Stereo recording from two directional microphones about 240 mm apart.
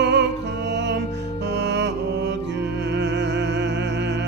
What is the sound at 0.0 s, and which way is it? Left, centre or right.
Music, right.